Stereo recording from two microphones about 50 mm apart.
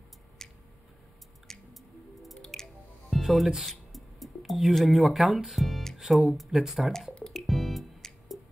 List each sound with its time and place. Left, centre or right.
0.4 s a sound: centre
1.5 s squish: centre
2.4 s drip: centre
3.2 s music: centre
5.9 s speech: centre
7.3 s music: centre